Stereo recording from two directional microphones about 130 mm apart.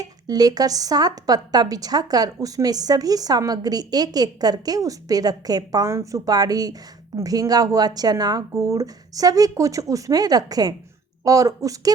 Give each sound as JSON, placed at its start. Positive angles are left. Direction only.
{"t": 0.0, "sound": "a woman's voice", "side_deg": -30}